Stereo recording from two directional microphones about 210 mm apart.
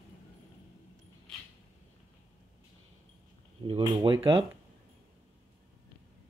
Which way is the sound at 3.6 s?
25° right (ahead or behind).